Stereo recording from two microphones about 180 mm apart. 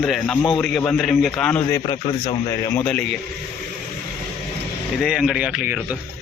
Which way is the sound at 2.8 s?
5° left (ahead or behind).